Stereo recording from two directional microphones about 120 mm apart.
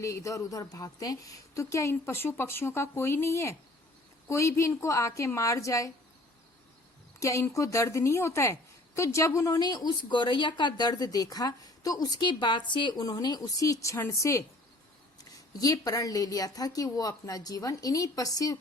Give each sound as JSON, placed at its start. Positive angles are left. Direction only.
{"t": 0.0, "sound": "a woman's voice", "side_deg": 25}
{"t": 7.2, "sound": "a woman's voice", "side_deg": 25}